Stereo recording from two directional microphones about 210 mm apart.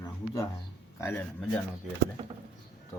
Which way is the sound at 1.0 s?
10° left (ahead or behind).